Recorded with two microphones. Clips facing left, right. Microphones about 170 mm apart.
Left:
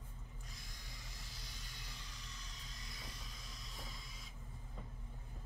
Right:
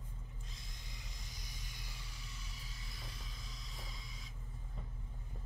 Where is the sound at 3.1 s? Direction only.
Centre (ahead or behind).